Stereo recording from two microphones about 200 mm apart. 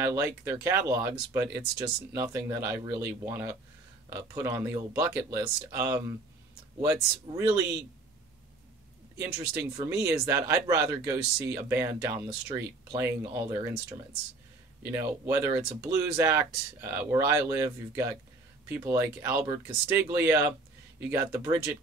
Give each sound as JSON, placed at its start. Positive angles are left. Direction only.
{"t": 0.0, "sound": "speech", "side_deg": -15}
{"t": 7.3, "sound": "speech", "side_deg": -15}
{"t": 9.2, "sound": "speech", "side_deg": -10}